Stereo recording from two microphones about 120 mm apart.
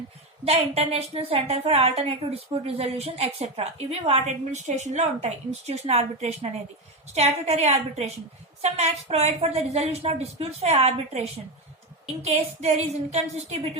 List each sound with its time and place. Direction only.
0.4 s a woman's voice: 60° right (ahead or behind)